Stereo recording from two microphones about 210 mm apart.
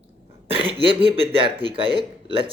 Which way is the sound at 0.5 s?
25° right (ahead or behind).